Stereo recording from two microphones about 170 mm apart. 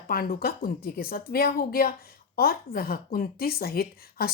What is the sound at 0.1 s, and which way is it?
A woman's voice, 60° left (ahead or behind).